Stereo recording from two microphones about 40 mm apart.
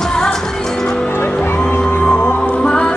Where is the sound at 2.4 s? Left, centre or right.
Centre.